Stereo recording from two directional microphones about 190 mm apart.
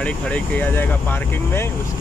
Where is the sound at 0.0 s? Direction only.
10° left (ahead or behind).